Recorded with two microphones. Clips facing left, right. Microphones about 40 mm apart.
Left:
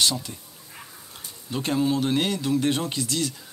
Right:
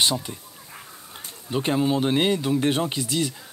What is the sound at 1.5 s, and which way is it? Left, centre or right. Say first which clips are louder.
Speech: right 2 dB; centre.